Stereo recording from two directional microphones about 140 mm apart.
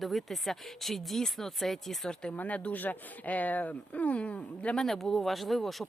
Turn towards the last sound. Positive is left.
turn(degrees=0)  # may be behind; listen again after turning